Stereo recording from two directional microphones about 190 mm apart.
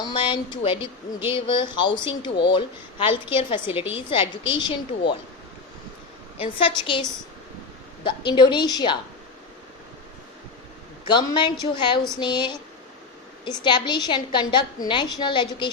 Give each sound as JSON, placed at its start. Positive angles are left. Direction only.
{"t": 0.0, "sound": "a woman's voice", "side_deg": 25}
{"t": 6.4, "sound": "a woman's voice", "side_deg": 30}
{"t": 11.0, "sound": "a woman's voice", "side_deg": 25}